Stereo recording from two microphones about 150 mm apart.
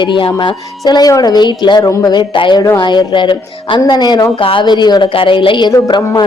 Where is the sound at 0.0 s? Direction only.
30° left (ahead or behind).